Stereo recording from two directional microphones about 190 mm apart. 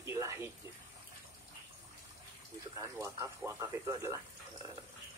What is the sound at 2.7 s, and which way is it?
Speech, 15° right (ahead or behind).